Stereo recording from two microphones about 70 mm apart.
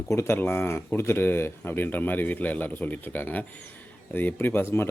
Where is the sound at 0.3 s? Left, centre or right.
Left.